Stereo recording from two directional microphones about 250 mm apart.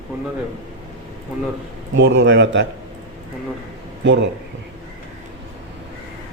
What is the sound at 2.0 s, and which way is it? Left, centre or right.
Speech, right.